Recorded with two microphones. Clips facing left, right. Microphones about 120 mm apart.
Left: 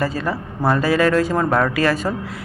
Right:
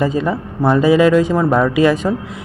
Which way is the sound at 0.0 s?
20° right (ahead or behind).